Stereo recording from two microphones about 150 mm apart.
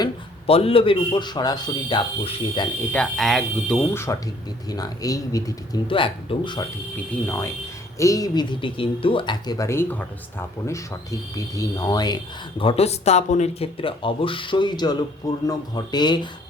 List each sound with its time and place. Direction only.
0.4 s speech: 40° left (ahead or behind)
2.9 s speech: 5° left (ahead or behind)
3.9 s speech: 20° left (ahead or behind)
6.9 s speech: 15° left (ahead or behind)